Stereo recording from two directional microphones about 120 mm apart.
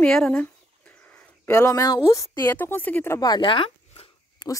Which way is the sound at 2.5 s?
15° left (ahead or behind).